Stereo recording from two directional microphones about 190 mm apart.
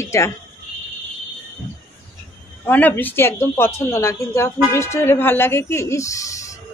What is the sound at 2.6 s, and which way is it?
Speech, 10° left (ahead or behind).